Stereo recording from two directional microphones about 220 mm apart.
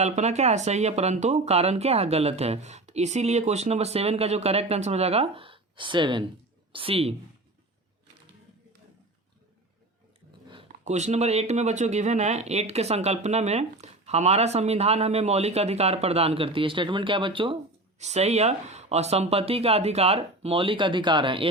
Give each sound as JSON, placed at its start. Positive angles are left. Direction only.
{"t": 0.0, "sound": "speech", "side_deg": -30}
{"t": 10.5, "sound": "speech", "side_deg": -30}